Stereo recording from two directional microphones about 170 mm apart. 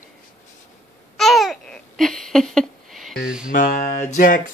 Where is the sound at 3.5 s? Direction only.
50° left (ahead or behind).